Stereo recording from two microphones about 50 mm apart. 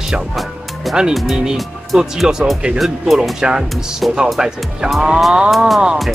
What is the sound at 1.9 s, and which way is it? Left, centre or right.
Speech, centre.